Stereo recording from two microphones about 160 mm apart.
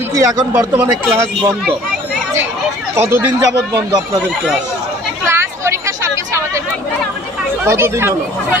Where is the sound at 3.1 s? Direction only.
20° right (ahead or behind).